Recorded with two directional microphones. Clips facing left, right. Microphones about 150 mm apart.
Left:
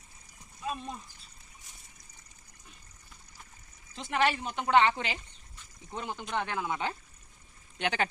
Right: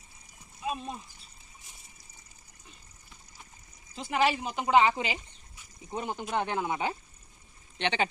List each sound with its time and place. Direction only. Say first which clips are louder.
0.6 s speech: right 2 dB; 5° right (ahead or behind)
3.9 s speech: right 2 dB; 5° right (ahead or behind)
7.8 s speech: right 1 dB; 5° left (ahead or behind)